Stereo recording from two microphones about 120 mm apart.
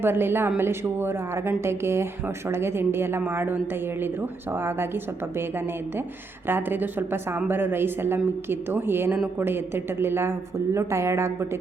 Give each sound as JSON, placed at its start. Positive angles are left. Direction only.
{"t": 0.0, "sound": "a woman's voice", "side_deg": -20}
{"t": 6.5, "sound": "a woman's voice", "side_deg": -15}